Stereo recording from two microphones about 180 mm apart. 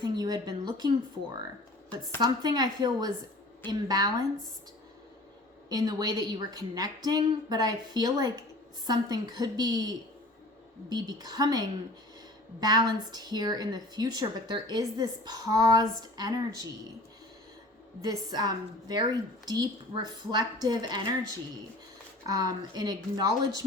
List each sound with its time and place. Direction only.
0.0 s a woman's voice: 25° right (ahead or behind)
2.2 s a woman's voice: 25° right (ahead or behind)
5.6 s a woman's voice: 20° right (ahead or behind)
18.0 s a woman's voice: 20° right (ahead or behind)
22.3 s a woman's voice: 20° right (ahead or behind)